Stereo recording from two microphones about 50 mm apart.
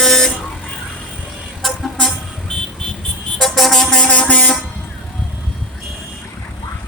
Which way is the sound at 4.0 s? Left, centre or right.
Left.